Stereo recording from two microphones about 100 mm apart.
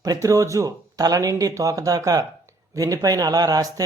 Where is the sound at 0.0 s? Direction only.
35° right (ahead or behind).